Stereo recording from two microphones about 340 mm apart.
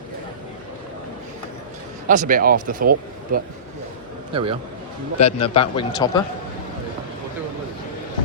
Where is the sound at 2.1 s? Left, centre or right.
Right.